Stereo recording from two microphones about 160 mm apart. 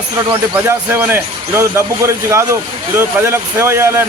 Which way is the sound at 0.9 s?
15° right (ahead or behind).